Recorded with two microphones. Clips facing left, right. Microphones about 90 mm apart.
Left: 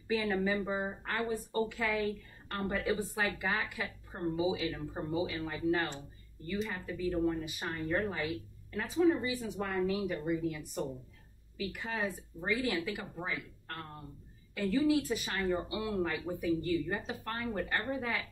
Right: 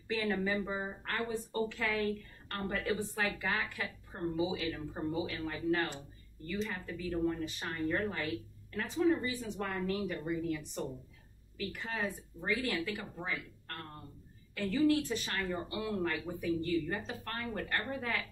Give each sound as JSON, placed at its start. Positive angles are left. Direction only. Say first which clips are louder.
{"t": 0.1, "sound": "speech", "louder": "left 2 dB", "side_deg": 5}